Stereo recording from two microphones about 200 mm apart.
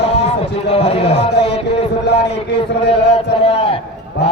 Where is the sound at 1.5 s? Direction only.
30° left (ahead or behind).